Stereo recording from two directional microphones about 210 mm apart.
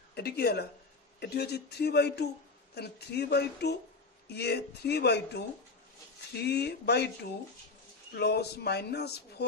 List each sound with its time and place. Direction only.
0.1 s speech: 50° left (ahead or behind)